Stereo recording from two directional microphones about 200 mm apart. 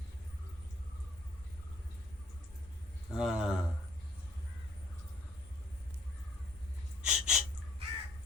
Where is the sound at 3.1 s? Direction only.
5° right (ahead or behind).